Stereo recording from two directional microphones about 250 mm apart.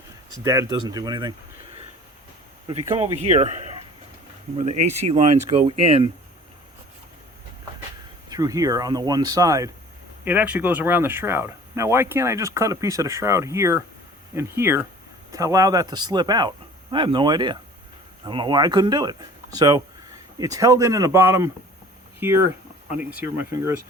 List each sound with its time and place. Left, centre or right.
0.3 s speech: centre
2.6 s a man's voice: centre
8.3 s speech: centre